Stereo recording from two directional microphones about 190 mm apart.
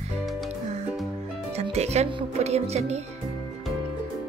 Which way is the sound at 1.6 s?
35° right (ahead or behind).